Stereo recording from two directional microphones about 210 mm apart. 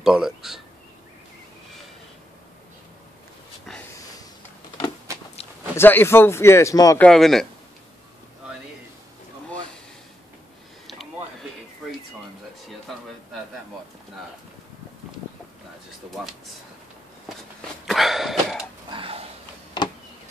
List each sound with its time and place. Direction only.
0.0 s speech: centre (ahead or behind)
5.8 s speech: 10° left (ahead or behind)
7.1 s speech: centre (ahead or behind)
12.9 s speech: centre (ahead or behind)
17.8 s cough: centre (ahead or behind)
18.9 s a sound: 25° right (ahead or behind)
19.8 s a sound: 20° left (ahead or behind)